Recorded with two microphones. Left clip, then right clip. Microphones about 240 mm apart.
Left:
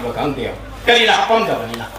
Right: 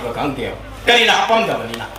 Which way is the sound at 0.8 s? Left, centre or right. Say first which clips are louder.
Even; right.